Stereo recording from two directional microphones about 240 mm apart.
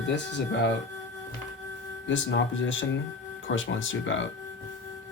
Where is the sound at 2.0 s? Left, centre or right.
Left.